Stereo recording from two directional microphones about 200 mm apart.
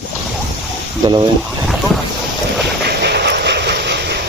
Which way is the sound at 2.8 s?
55° right (ahead or behind).